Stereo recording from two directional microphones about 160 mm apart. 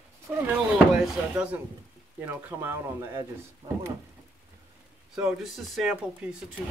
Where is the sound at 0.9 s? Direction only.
5° right (ahead or behind).